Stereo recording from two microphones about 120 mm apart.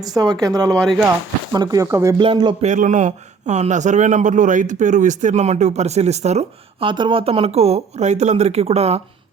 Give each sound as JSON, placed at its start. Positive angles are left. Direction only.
{"t": 0.1, "sound": "speech", "side_deg": -30}
{"t": 0.8, "sound": "speech", "side_deg": 5}
{"t": 1.5, "sound": "speech", "side_deg": -30}
{"t": 2.1, "sound": "speech", "side_deg": -40}
{"t": 2.6, "sound": "a man's voice", "side_deg": -85}
{"t": 6.8, "sound": "speech", "side_deg": -45}